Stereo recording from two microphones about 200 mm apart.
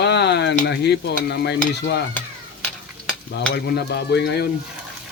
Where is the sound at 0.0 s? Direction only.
60° left (ahead or behind).